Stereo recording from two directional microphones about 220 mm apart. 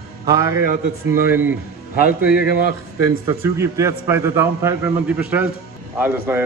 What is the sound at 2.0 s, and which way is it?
Speech, 45° left (ahead or behind).